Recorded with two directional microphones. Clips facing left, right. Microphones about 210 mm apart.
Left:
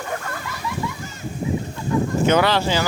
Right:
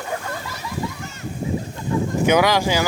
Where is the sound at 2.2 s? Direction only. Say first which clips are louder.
Right 2 dB; 10° right (ahead or behind).